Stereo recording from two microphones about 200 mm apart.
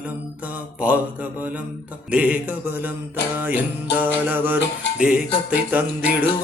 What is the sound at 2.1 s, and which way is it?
Music, 5° right (ahead or behind).